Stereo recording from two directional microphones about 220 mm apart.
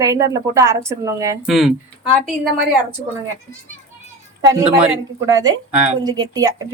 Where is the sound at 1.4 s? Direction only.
Centre (ahead or behind).